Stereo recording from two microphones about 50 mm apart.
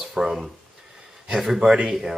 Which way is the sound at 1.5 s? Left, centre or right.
Centre.